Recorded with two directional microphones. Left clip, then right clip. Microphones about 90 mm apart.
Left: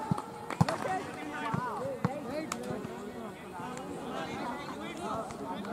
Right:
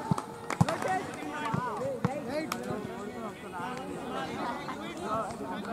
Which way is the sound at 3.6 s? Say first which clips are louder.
Right 2 dB; centre (ahead or behind).